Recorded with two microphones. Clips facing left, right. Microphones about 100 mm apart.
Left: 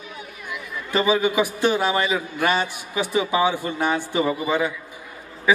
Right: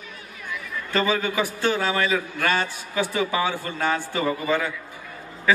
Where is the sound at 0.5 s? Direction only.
15° left (ahead or behind).